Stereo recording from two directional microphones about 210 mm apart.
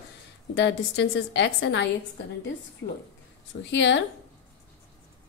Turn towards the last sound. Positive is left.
turn(degrees=60)  # may be behind; listen again after turning